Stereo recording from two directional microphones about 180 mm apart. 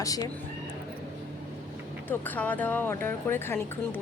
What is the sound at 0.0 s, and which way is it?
Speech, 20° left (ahead or behind).